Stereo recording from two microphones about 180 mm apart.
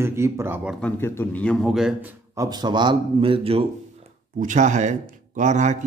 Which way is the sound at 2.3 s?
20° right (ahead or behind).